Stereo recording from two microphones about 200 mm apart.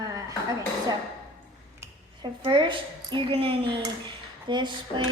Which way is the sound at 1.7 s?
20° right (ahead or behind).